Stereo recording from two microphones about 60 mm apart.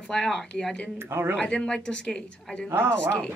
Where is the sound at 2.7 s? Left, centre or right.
Right.